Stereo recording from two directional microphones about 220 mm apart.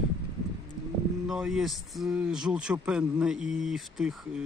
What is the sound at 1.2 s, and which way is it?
Speech, centre (ahead or behind).